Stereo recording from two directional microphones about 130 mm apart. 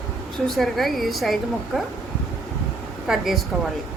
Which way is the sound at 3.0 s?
Centre (ahead or behind).